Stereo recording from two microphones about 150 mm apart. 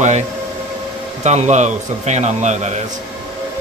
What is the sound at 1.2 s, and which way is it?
A man's voice, 50° right (ahead or behind).